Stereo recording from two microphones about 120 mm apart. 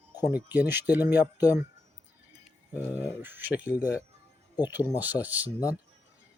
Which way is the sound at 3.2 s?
15° right (ahead or behind).